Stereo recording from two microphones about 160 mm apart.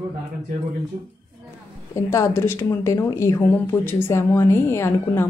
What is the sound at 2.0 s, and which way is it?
Speech, 15° left (ahead or behind).